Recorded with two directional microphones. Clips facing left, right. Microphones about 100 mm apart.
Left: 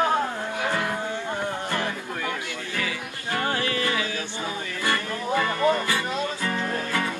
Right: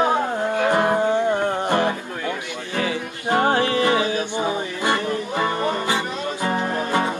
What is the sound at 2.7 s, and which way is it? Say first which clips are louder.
Music: right 8 dB; 30° right (ahead or behind).